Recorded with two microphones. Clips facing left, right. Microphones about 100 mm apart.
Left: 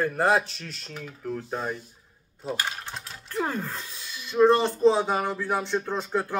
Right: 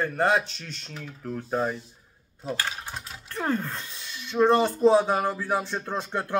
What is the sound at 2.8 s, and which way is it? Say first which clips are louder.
Speech: right 1 dB; 5° right (ahead or behind).